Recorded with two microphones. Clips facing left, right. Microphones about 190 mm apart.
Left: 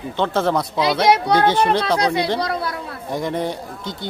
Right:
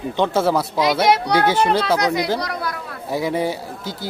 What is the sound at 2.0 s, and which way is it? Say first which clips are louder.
Speech: left 1 dB; 30° left (ahead or behind).